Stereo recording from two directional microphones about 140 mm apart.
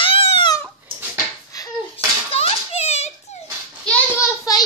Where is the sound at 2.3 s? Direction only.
45° left (ahead or behind).